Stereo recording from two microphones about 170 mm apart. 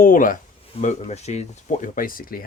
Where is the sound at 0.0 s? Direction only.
55° left (ahead or behind).